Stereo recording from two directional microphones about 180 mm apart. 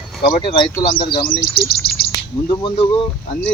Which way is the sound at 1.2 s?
55° left (ahead or behind).